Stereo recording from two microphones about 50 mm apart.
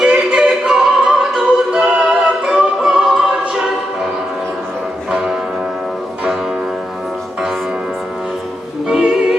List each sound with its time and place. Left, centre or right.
0.0 s music: centre
5.1 s church bell: centre
8.9 s music: centre